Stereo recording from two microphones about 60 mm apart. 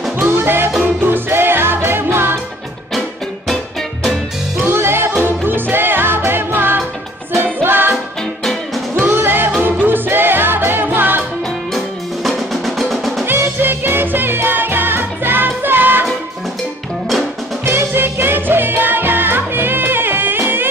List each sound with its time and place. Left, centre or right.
0.2 s music: right
4.6 s music: right
9.0 s music: right
11.7 s music: centre
13.6 s music: right
17.6 s music: right